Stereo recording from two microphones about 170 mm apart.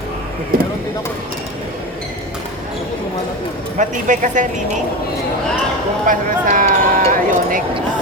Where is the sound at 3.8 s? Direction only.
45° right (ahead or behind).